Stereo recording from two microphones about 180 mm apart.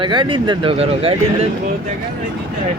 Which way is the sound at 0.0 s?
25° right (ahead or behind).